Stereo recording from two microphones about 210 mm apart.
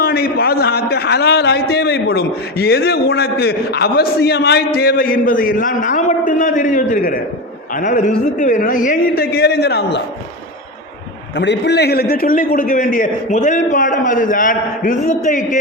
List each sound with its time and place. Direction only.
0.0 s a man's voice: 45° left (ahead or behind)
11.3 s a man's voice: 55° left (ahead or behind); by 15.4 s 40° left (ahead or behind)